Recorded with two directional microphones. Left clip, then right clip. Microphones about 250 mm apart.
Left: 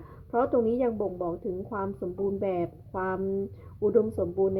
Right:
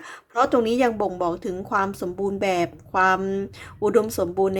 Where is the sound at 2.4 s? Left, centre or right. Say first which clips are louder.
Right 7 dB; centre.